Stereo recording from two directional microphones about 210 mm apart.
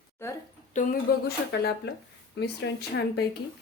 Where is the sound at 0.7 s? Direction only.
45° left (ahead or behind).